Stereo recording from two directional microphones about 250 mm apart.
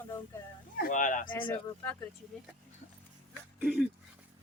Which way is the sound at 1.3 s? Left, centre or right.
Centre.